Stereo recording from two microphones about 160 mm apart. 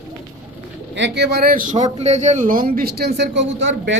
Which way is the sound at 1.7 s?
45° right (ahead or behind).